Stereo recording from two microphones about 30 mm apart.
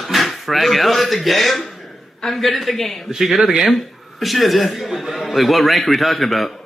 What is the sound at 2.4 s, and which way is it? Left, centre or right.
Speech, centre.